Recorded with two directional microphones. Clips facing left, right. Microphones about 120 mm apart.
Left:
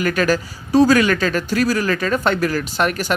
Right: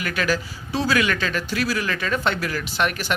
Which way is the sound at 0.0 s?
45° left (ahead or behind).